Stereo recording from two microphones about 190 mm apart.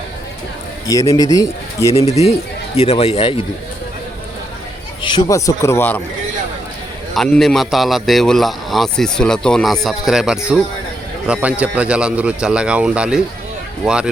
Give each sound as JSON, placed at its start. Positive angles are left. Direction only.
{"t": 0.9, "sound": "a man's voice", "side_deg": 20}
{"t": 2.0, "sound": "speech", "side_deg": 35}
{"t": 5.0, "sound": "a man's voice", "side_deg": 20}
{"t": 7.1, "sound": "a man's voice", "side_deg": 0}